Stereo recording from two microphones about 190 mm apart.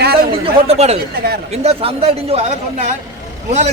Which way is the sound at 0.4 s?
35° right (ahead or behind).